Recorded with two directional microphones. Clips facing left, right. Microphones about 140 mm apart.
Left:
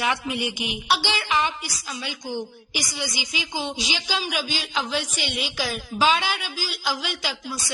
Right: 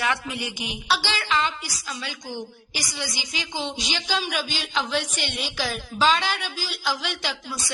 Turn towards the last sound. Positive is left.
turn(degrees=5)  # may be behind; listen again after turning